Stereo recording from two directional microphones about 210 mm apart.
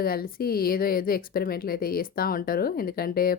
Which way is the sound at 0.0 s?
45° left (ahead or behind).